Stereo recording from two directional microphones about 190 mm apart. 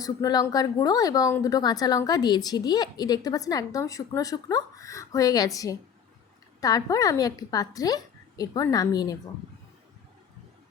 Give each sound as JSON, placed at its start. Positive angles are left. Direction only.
{"t": 0.0, "sound": "speech", "side_deg": 20}